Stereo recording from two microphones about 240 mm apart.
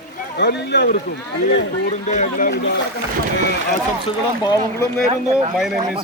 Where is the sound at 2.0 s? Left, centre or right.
Left.